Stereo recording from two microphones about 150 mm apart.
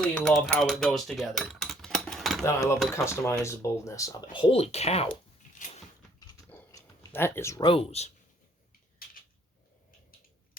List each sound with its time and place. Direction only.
0.0 s speech: 5° left (ahead or behind)
0.6 s dishes: centre (ahead or behind)
2.4 s speech: 20° left (ahead or behind); by 5.1 s 45° left (ahead or behind)
5.5 s a sound: 55° left (ahead or behind)
6.7 s a sound: 20° left (ahead or behind)
7.6 s speech: 35° left (ahead or behind)